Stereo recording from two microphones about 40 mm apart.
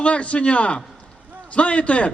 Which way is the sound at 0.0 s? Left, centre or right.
Left.